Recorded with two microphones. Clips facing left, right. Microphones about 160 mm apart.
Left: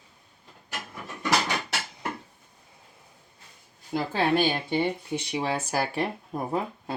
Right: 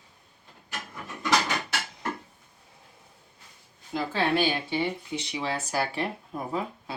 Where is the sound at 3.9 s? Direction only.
45° left (ahead or behind).